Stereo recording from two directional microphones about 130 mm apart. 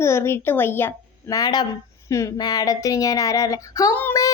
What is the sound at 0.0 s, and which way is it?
Speech, 20° left (ahead or behind).